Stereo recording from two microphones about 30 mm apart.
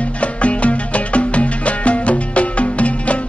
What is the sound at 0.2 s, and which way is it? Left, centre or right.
Music, left.